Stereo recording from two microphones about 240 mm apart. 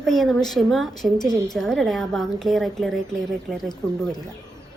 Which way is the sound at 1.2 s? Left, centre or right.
Centre.